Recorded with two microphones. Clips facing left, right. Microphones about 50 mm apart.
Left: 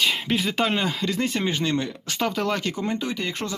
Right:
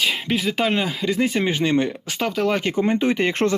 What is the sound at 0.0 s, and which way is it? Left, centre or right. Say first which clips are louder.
Speech: right 2 dB; centre.